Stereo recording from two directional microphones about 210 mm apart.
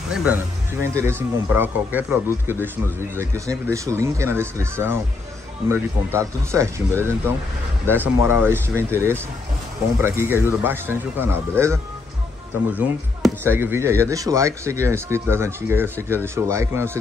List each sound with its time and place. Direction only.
0.1 s speech: 5° right (ahead or behind)